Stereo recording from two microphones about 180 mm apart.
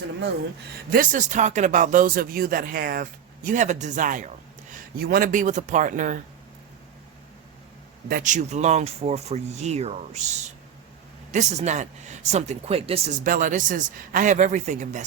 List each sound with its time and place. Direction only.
0.9 s speech: 50° right (ahead or behind)
4.7 s speech: 55° right (ahead or behind)
8.0 s speech: 50° right (ahead or behind)
13.2 s speech: 45° right (ahead or behind)